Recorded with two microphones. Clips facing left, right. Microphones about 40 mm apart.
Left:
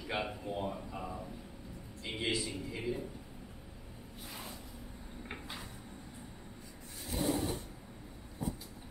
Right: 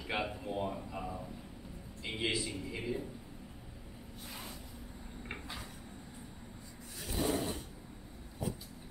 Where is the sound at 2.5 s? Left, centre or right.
Centre.